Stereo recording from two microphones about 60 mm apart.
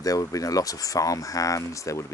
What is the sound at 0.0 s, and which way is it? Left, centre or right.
Speech, left.